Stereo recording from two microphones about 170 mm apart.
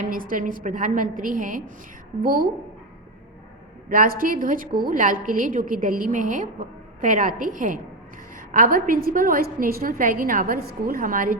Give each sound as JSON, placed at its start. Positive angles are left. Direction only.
{"t": 0.0, "sound": "a woman's voice", "side_deg": -55}
{"t": 3.8, "sound": "a woman's voice", "side_deg": -60}